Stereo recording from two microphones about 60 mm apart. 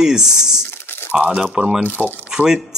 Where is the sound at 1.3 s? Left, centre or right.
Centre.